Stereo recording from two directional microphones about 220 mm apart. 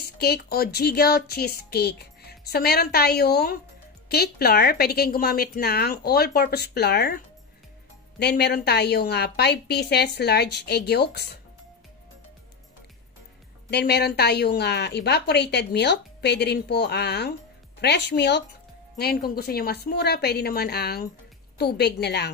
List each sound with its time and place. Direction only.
0.0 s a woman's voice: 45° left (ahead or behind)
13.7 s a woman's voice: 50° left (ahead or behind)